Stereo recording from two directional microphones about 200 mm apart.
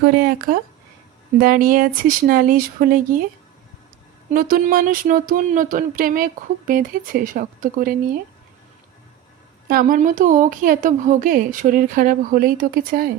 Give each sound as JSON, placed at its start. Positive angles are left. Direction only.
{"t": 0.0, "sound": "speech", "side_deg": -50}
{"t": 4.3, "sound": "speech", "side_deg": -45}
{"t": 9.6, "sound": "speech", "side_deg": -45}